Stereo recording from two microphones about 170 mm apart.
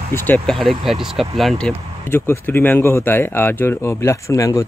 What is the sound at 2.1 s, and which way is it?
Speech, 15° left (ahead or behind).